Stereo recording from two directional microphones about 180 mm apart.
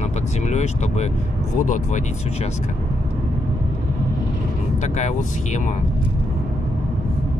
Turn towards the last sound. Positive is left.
turn(degrees=40)  # may be behind; listen again after turning